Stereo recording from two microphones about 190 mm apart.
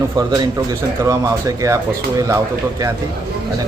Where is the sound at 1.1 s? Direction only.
15° right (ahead or behind).